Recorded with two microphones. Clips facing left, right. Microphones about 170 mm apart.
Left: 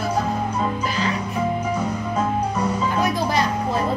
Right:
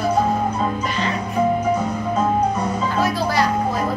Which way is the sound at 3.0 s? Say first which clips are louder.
Right 3 dB; 20° left (ahead or behind).